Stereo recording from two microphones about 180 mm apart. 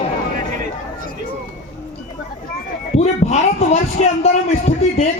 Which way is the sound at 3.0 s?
40° left (ahead or behind).